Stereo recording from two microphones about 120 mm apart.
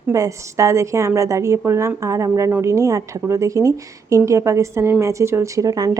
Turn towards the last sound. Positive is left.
turn(degrees=-30)  # may be behind; listen again after turning